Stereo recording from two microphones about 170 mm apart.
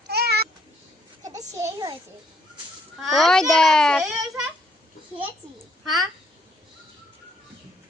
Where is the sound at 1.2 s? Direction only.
20° right (ahead or behind).